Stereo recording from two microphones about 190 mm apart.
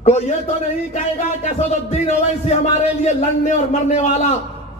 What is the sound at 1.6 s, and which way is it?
A man's voice, 35° left (ahead or behind).